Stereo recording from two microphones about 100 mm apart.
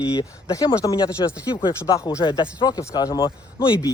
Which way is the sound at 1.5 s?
50° left (ahead or behind).